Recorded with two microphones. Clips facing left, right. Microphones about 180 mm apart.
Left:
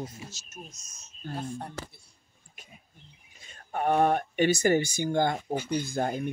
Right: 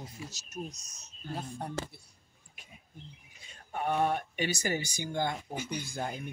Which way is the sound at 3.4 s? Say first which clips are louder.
Left 6 dB; 50° left (ahead or behind).